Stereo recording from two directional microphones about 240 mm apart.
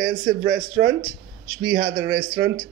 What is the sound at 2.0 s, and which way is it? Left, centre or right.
Speech, right.